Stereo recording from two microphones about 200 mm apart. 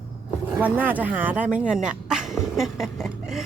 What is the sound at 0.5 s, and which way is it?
Speech, 10° right (ahead or behind).